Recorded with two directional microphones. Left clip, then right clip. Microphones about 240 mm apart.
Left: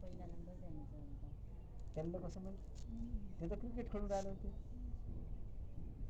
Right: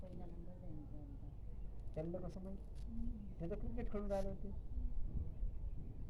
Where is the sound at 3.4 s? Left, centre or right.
Centre.